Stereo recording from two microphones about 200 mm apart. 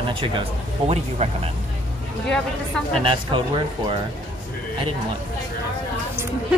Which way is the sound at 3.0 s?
25° right (ahead or behind).